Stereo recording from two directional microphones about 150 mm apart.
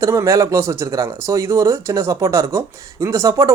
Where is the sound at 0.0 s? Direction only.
20° right (ahead or behind).